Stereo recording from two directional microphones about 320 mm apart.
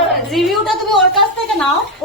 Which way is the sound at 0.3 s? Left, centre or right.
Centre.